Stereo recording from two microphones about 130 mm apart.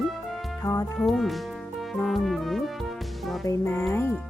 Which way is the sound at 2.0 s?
Centre (ahead or behind).